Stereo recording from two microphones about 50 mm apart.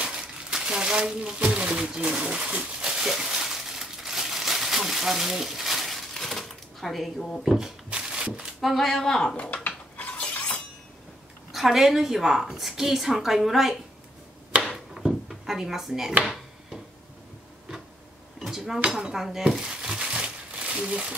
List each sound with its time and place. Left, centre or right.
0.0 s a sound: centre
7.4 s speech: centre
7.9 s a sound: centre
8.5 s speech: centre
9.7 s stir: left
11.5 s a woman's voice: centre
15.0 s drawer open or close: centre
18.4 s a sound: centre
18.9 s speech: centre
19.6 s crumpling: centre